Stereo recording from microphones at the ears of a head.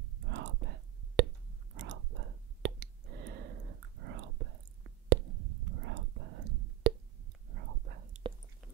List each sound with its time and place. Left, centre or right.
0.0 s whispering: right